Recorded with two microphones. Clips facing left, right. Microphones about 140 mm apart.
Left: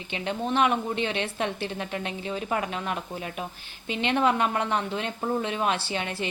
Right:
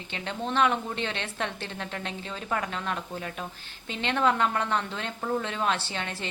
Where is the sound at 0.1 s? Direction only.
15° left (ahead or behind).